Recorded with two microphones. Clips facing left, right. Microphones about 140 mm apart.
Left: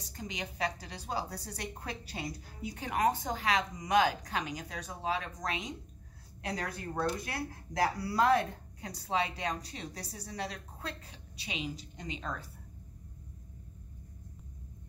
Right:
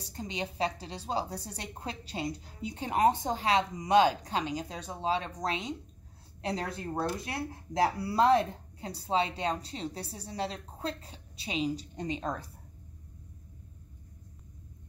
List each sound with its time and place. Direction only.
0.0 s a woman's voice: 30° right (ahead or behind)